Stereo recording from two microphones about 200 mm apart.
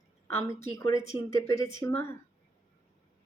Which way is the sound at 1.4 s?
15° left (ahead or behind).